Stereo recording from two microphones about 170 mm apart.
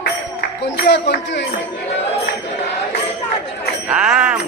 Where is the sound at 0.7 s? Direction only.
70° left (ahead or behind).